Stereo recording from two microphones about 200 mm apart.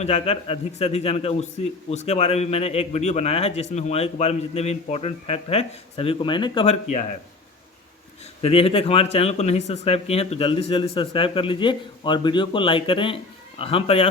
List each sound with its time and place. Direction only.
0.0 s a man's voice: 30° left (ahead or behind)
8.4 s speech: 30° left (ahead or behind)